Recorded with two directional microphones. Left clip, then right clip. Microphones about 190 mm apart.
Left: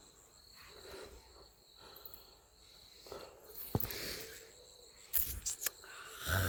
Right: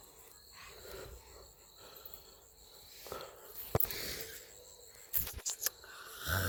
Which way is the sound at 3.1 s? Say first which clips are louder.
Right 4 dB; 15° right (ahead or behind).